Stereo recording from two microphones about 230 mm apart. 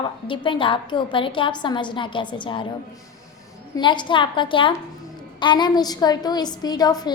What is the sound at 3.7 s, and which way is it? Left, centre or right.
A woman's voice, centre.